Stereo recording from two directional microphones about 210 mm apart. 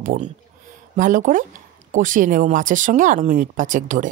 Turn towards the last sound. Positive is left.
turn(degrees=-35)  # may be behind; listen again after turning